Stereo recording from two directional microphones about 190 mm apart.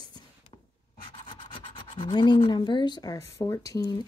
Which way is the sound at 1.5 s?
25° left (ahead or behind).